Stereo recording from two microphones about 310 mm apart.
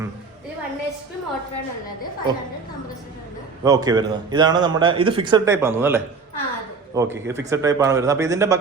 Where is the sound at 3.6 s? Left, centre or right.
Centre.